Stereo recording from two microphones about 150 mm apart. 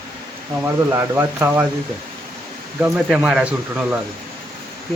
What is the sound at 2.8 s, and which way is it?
Speech, 5° right (ahead or behind).